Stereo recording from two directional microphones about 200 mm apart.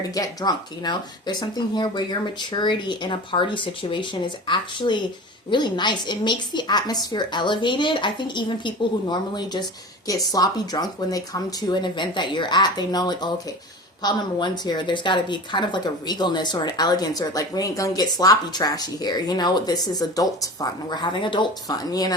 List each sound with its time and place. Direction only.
0.1 s a woman's voice: 20° left (ahead or behind)